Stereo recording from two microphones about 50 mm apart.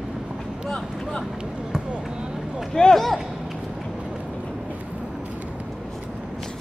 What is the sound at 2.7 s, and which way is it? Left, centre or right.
Speech, centre.